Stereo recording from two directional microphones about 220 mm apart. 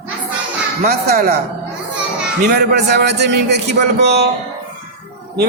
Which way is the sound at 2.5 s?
45° right (ahead or behind).